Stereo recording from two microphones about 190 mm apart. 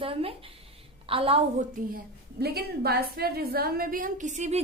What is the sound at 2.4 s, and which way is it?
A woman's voice, 55° right (ahead or behind).